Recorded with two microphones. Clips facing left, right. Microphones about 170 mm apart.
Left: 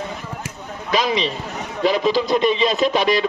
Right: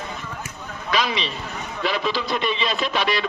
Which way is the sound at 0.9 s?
40° left (ahead or behind).